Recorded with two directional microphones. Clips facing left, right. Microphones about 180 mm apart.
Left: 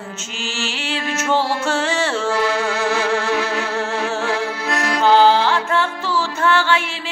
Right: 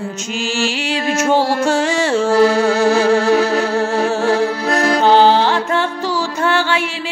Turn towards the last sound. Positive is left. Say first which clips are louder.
# right 1 dB
turn(degrees=-15)  # may be behind; listen again after turning